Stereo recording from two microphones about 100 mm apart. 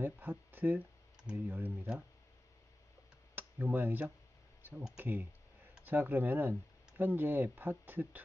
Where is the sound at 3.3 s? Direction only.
20° right (ahead or behind).